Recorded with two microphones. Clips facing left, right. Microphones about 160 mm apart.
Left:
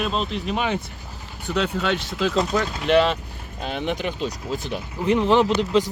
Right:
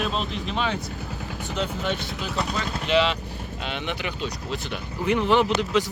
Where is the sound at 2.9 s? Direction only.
50° left (ahead or behind).